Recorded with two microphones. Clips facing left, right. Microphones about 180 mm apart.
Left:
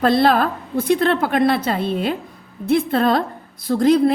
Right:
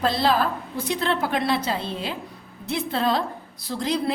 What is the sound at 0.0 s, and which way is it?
A woman's voice, 55° left (ahead or behind).